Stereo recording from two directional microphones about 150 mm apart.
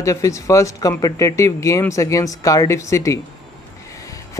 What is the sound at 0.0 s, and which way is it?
Speech, 20° left (ahead or behind).